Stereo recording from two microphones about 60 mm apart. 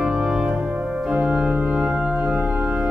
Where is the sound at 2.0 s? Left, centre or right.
Right.